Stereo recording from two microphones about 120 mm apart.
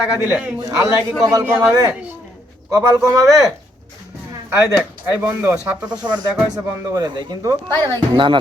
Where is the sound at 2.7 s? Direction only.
25° right (ahead or behind).